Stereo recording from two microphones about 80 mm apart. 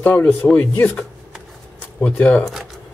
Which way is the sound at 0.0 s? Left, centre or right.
Left.